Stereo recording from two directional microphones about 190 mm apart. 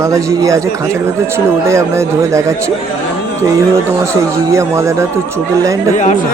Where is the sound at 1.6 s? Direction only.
15° right (ahead or behind).